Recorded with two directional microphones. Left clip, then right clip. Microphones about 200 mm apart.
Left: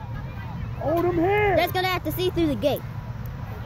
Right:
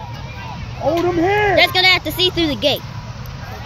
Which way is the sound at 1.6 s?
5° left (ahead or behind).